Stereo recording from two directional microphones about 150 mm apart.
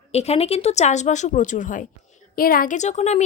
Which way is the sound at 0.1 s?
45° left (ahead or behind).